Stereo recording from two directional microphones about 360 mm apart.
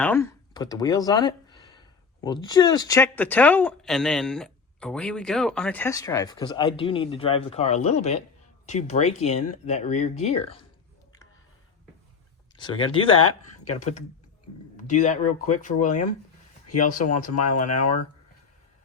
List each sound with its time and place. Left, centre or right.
0.0 s speech: centre
12.5 s speech: centre
17.4 s speech: left